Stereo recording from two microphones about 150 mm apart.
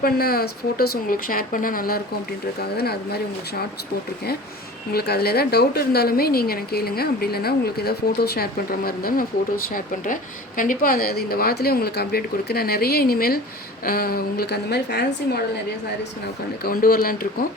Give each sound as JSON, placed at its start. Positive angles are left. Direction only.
{"t": 0.0, "sound": "speech", "side_deg": 85}
{"t": 2.6, "sound": "a woman's voice", "side_deg": 90}
{"t": 4.9, "sound": "a woman's voice", "side_deg": 90}
{"t": 10.6, "sound": "a woman's voice", "side_deg": 70}
{"t": 16.6, "sound": "speech", "side_deg": 75}